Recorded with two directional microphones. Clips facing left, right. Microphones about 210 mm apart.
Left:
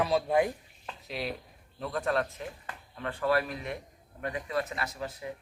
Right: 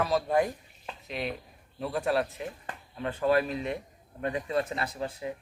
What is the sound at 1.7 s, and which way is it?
Speech, 10° right (ahead or behind).